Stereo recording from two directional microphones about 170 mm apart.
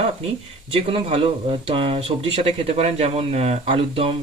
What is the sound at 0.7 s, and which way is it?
Speech, 35° right (ahead or behind).